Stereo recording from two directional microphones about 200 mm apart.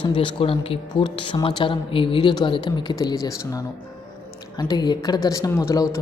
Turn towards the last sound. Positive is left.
turn(degrees=15)  # may be behind; listen again after turning